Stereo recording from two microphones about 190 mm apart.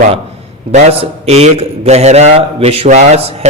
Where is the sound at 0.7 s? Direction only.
35° right (ahead or behind).